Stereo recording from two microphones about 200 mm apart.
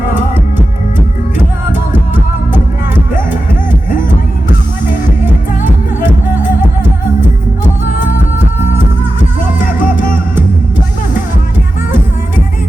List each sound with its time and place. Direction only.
5.6 s music: 40° left (ahead or behind)
9.6 s music: 40° left (ahead or behind)